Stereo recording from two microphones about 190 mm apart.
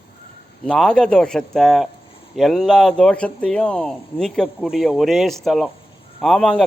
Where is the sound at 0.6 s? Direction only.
5° left (ahead or behind).